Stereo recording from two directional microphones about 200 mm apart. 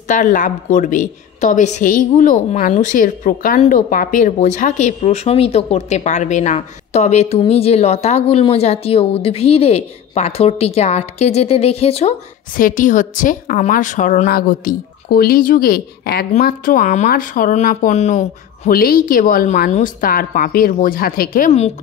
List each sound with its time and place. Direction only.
0.1 s a woman's voice: 40° left (ahead or behind)
12.5 s a woman's voice: 40° left (ahead or behind)
18.7 s a woman's voice: 45° left (ahead or behind)
21.5 s a woman's voice: 30° left (ahead or behind)